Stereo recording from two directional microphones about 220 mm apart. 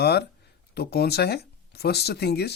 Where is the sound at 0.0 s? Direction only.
45° left (ahead or behind).